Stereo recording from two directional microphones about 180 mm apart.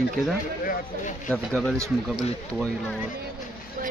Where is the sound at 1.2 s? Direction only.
Centre (ahead or behind).